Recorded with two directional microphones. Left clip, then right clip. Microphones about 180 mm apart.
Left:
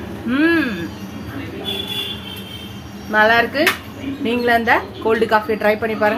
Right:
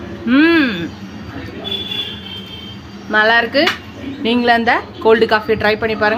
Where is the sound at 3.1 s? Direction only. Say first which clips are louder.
Right 1 dB; 30° right (ahead or behind).